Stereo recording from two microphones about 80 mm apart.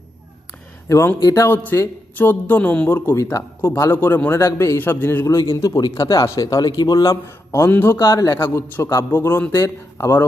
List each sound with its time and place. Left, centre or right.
0.9 s a man's voice: left
1.5 s speech: left
2.9 s a man's voice: left
3.9 s a man's voice: left
4.8 s speech: left
5.2 s a man's voice: left
6.0 s a man's voice: left
7.3 s a man's voice: left
7.9 s a man's voice: left
8.4 s a man's voice: left